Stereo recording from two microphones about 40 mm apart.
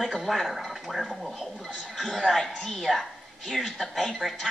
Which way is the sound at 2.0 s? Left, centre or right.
Centre.